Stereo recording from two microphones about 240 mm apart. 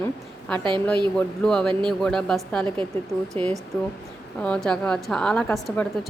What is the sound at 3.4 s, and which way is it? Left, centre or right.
Speech, right.